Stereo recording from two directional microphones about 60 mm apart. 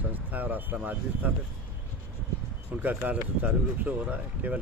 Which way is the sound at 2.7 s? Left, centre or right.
Right.